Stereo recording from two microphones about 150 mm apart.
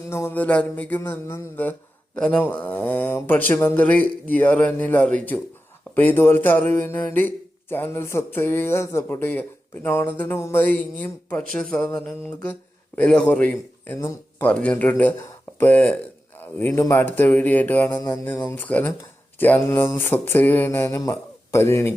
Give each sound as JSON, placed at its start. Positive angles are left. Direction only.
{"t": 0.1, "sound": "speech", "side_deg": 15}
{"t": 13.0, "sound": "a man's voice", "side_deg": 5}